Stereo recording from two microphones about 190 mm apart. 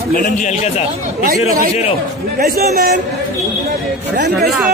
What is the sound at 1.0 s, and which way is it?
Speech, 50° right (ahead or behind).